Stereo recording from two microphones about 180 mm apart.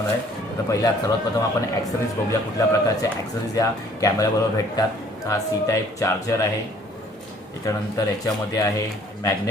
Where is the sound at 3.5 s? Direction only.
20° left (ahead or behind).